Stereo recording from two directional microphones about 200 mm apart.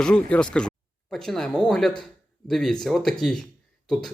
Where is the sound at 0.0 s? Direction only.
5° left (ahead or behind).